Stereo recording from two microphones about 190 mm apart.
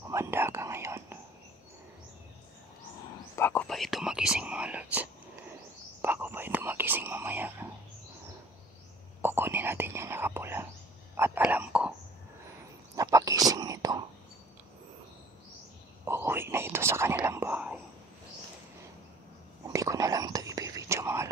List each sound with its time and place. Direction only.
0.1 s whispering: 15° right (ahead or behind)
3.3 s whispering: 10° left (ahead or behind); by 7.6 s 10° right (ahead or behind)
9.2 s whispering: 10° right (ahead or behind)
12.9 s a sound: 20° right (ahead or behind)
13.5 s whispering: 20° right (ahead or behind)
16.1 s whispering: 10° right (ahead or behind)
19.7 s whispering: 15° right (ahead or behind)